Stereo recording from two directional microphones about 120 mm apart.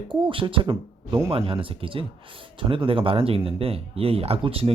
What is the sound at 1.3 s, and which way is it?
Speech, 50° right (ahead or behind).